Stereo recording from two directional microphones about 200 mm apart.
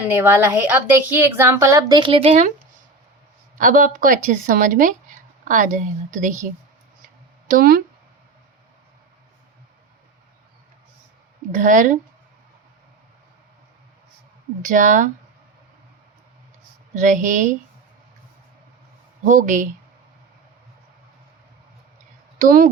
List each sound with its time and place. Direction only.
0.1 s a woman's voice: 10° right (ahead or behind); by 2.3 s 25° right (ahead or behind)
3.6 s speech: 40° right (ahead or behind)
7.4 s speech: 45° right (ahead or behind)
11.5 s speech: 40° right (ahead or behind)
14.6 s speech: 40° right (ahead or behind)
16.9 s speech: 40° right (ahead or behind)
19.2 s speech: 40° right (ahead or behind)
22.4 s speech: 45° right (ahead or behind)